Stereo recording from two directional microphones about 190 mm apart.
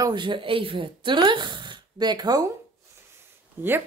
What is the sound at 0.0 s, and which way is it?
Speech, 25° right (ahead or behind).